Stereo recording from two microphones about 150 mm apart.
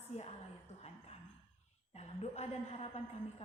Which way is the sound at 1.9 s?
45° left (ahead or behind).